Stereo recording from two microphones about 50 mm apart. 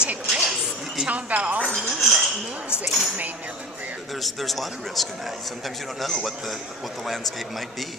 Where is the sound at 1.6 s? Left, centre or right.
Centre.